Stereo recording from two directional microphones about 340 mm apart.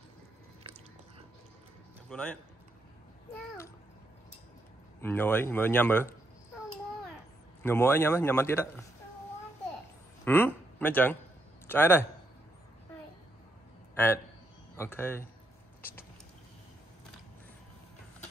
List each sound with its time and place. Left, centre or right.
0.7 s biting: centre
2.0 s speech: centre
5.0 s speech: centre
7.6 s a man's voice: centre
10.2 s a man's voice: centre
13.9 s a man's voice: centre